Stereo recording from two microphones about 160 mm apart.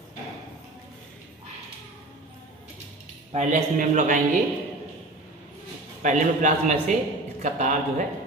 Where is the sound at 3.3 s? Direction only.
45° right (ahead or behind).